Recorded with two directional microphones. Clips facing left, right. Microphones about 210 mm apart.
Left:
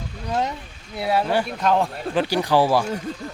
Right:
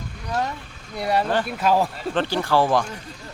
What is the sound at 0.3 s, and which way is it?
Vehicle, 20° left (ahead or behind).